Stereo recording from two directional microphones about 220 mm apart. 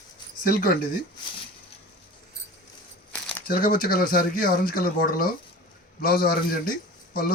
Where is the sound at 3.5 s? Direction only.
40° left (ahead or behind).